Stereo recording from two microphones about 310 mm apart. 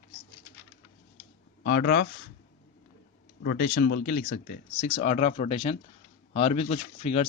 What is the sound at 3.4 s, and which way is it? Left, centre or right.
Speech, left.